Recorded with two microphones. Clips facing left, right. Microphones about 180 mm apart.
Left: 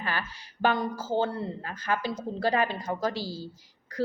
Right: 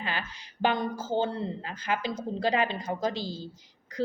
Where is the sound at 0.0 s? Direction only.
20° right (ahead or behind).